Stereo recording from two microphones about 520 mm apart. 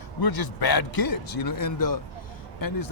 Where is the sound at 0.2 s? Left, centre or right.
Left.